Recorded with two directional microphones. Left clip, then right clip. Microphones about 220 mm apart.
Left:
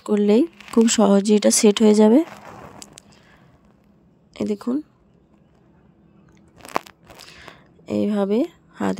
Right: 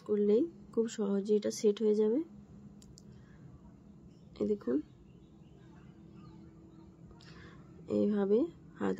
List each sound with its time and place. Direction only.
0.0 s speech: 45° left (ahead or behind)
4.3 s speech: 45° left (ahead or behind)
7.2 s a sound: 45° left (ahead or behind)